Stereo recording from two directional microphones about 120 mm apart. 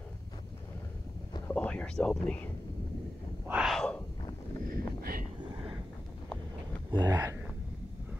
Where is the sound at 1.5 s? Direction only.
10° left (ahead or behind).